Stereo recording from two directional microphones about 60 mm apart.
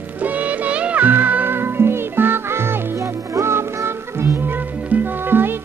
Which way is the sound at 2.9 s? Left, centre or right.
Right.